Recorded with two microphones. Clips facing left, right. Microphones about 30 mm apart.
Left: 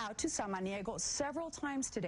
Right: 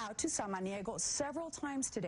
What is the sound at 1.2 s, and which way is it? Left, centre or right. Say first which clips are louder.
Speech: left 2 dB; left.